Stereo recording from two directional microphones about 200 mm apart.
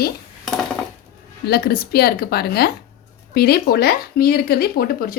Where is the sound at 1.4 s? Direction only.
50° left (ahead or behind).